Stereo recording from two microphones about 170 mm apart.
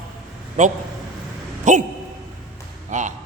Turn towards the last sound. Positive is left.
turn(degrees=-45)  # may be behind; listen again after turning